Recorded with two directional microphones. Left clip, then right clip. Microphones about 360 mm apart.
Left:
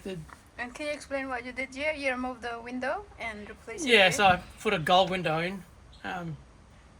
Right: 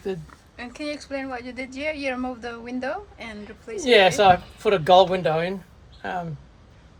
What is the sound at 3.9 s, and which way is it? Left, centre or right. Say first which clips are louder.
Speech: right 6 dB; right.